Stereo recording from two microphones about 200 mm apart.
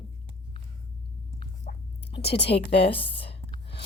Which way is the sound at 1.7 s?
40° left (ahead or behind).